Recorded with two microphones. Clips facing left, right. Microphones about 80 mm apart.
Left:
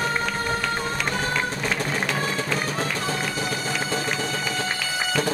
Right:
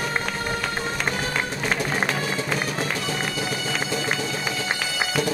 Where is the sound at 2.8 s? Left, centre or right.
Left.